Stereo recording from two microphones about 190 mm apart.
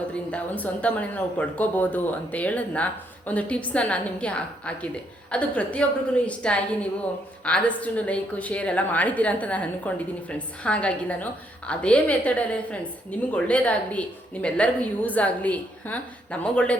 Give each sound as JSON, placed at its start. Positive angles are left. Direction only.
{"t": 0.1, "sound": "a woman's voice", "side_deg": 5}